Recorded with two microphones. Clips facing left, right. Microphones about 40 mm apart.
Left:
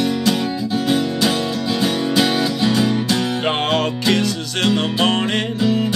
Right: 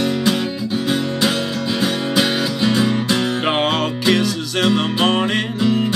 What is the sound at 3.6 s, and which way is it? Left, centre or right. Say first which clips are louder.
Music: even; centre.